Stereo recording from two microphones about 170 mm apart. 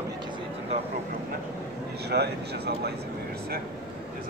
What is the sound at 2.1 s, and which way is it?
Speech, 70° right (ahead or behind).